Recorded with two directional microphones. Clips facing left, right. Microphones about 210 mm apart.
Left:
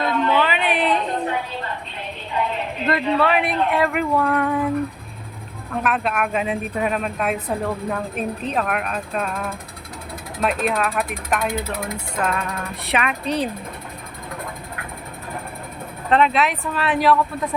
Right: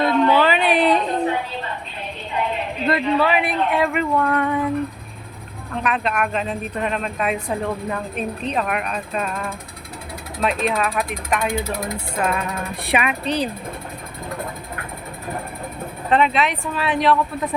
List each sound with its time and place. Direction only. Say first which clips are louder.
0.3 s a sound: right 3 dB; 35° right (ahead or behind)
2.8 s speech: right 1 dB; centre (ahead or behind)
5.7 s speech: even; 5° left (ahead or behind)
12.1 s speech: right 1 dB; 10° right (ahead or behind)
13.2 s speech: even; centre (ahead or behind)
16.0 s speech: even; centre (ahead or behind)